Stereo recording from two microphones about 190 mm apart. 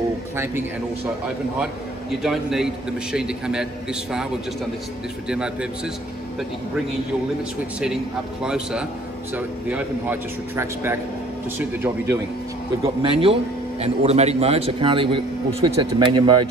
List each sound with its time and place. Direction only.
2.2 s a man's voice: centre (ahead or behind)
5.3 s a man's voice: 5° right (ahead or behind)
7.8 s a man's voice: 5° right (ahead or behind)
12.8 s a man's voice: 30° right (ahead or behind)